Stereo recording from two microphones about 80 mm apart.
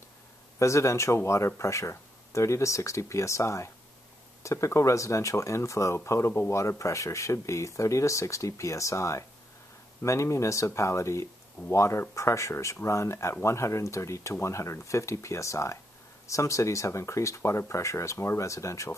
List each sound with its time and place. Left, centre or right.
0.6 s speech: left